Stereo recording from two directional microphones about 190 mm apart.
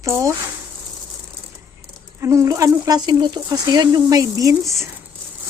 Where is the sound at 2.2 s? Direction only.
15° right (ahead or behind).